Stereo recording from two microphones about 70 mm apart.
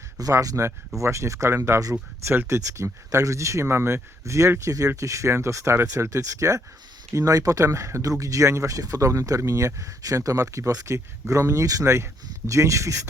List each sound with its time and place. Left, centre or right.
0.2 s speech: right
2.6 s speech: right
7.6 s speech: right